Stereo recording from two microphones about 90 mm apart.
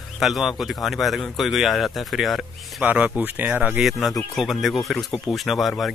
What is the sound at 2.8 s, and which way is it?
Speech, 15° right (ahead or behind).